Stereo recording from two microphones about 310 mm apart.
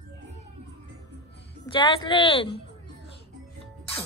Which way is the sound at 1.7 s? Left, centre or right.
Centre.